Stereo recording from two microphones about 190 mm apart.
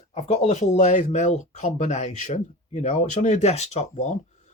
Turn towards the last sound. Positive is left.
turn(degrees=35)  # may be behind; listen again after turning